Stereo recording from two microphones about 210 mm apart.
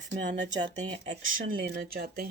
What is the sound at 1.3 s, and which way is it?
Speech, 45° right (ahead or behind).